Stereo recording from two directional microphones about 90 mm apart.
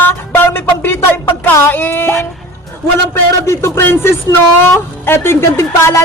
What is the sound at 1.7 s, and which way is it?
Speech, 25° left (ahead or behind).